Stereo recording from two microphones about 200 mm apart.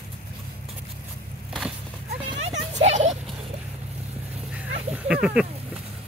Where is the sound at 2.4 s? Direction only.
35° right (ahead or behind).